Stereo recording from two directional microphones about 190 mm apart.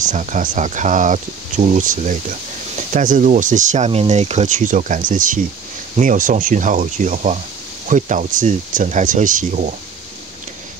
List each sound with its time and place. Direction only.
0.0 s speech: 40° right (ahead or behind)